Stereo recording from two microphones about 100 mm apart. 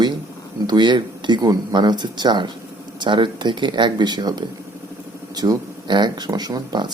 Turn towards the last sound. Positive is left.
turn(degrees=-45)  # may be behind; listen again after turning